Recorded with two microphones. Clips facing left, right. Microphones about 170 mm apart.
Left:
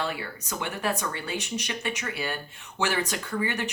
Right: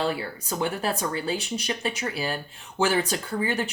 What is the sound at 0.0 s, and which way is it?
Speech, 35° right (ahead or behind).